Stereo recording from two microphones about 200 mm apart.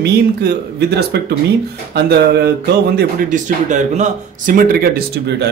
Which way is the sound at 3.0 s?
45° right (ahead or behind).